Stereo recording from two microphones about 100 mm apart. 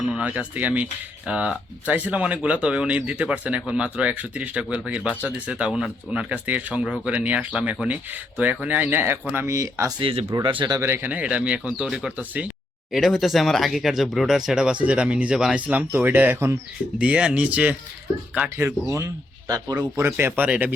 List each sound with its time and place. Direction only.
0.1 s speech: 10° right (ahead or behind)
9.6 s speech: 30° right (ahead or behind)
10.0 s speech: 65° right (ahead or behind)
10.4 s speech: 55° right (ahead or behind)
10.8 s speech: 25° right (ahead or behind)
11.1 s speech: 15° right (ahead or behind)
12.9 s speech: centre (ahead or behind); by 16.6 s 25° right (ahead or behind)
17.0 s speech: 10° right (ahead or behind)
18.3 s speech: 25° right (ahead or behind); by 19.8 s 40° right (ahead or behind)
20.0 s speech: 25° right (ahead or behind)